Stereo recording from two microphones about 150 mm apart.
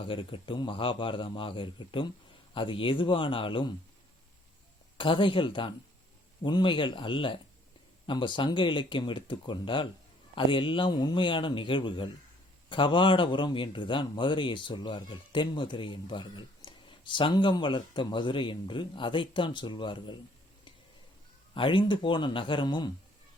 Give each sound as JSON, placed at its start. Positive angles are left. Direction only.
{"t": 0.0, "sound": "a man's voice", "side_deg": 35}
{"t": 4.9, "sound": "a man's voice", "side_deg": 35}
{"t": 21.5, "sound": "a man's voice", "side_deg": 35}